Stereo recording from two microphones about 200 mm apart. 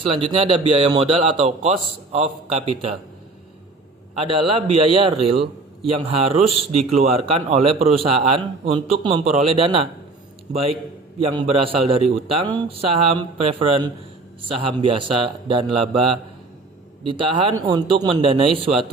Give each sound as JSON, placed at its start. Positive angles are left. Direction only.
{"t": 0.0, "sound": "a man's voice", "side_deg": -25}
{"t": 4.2, "sound": "a man's voice", "side_deg": -25}